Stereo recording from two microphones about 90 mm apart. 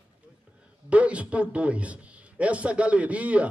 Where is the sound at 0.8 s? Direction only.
15° right (ahead or behind).